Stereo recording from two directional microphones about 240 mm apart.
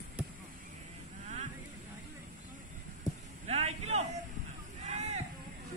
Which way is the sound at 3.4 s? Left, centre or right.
Right.